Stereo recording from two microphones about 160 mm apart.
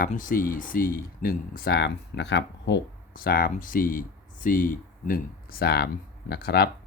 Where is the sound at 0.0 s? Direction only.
55° left (ahead or behind); by 6.7 s 85° left.